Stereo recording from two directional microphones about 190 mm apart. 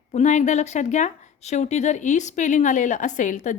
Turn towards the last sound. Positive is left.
turn(degrees=40)  # may be behind; listen again after turning